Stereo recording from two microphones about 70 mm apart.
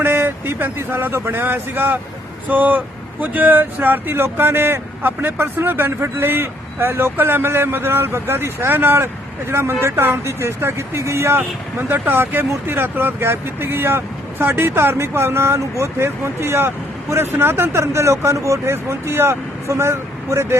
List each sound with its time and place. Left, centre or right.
0.0 s speech: right
11.8 s speech: right